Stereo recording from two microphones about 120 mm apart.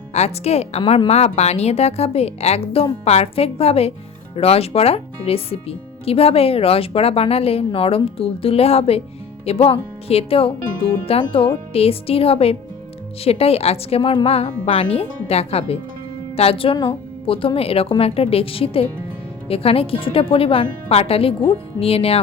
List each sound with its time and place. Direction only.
0.1 s speech: 65° left (ahead or behind); by 20.7 s 45° left (ahead or behind)
20.8 s speech: 60° left (ahead or behind)